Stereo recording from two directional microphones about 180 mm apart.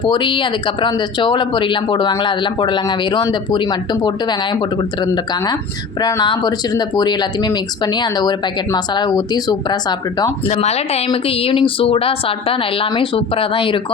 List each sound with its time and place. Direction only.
0.0 s speech: 25° left (ahead or behind)
10.5 s a woman's voice: 35° left (ahead or behind)